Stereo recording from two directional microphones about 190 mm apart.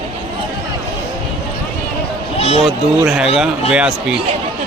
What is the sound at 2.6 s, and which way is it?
A man's voice, centre (ahead or behind).